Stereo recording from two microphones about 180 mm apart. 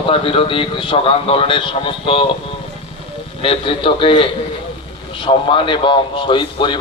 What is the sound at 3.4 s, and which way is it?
A man's voice, 30° left (ahead or behind).